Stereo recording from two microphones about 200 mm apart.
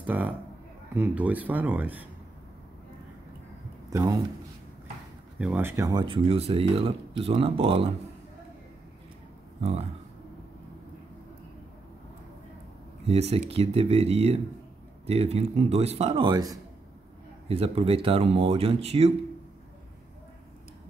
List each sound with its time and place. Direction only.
0.0 s a man's voice: 10° right (ahead or behind)
3.9 s speech: 20° right (ahead or behind)
5.4 s speech: 10° right (ahead or behind); by 7.9 s 25° right (ahead or behind)
9.6 s speech: 30° right (ahead or behind)
13.0 s speech: 30° right (ahead or behind)